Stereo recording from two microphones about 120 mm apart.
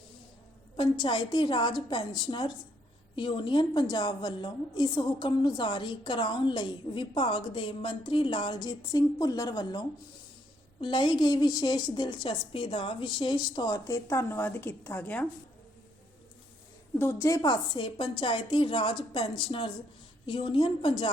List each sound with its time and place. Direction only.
0.8 s a woman's voice: 45° left (ahead or behind); by 15.3 s 15° left (ahead or behind)
17.0 s a woman's voice: 20° left (ahead or behind); by 20.9 s 45° left (ahead or behind)